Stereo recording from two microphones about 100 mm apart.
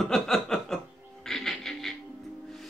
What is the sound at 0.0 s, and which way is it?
Chuckle, centre (ahead or behind).